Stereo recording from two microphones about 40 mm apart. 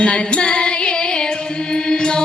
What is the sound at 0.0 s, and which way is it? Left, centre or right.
Music, left.